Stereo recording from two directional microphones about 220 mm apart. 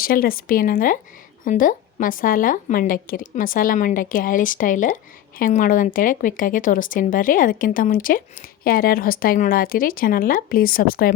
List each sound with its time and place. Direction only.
0.0 s speech: 40° left (ahead or behind)